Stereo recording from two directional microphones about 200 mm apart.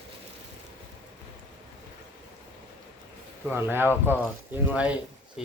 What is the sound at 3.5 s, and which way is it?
Speech, 10° right (ahead or behind).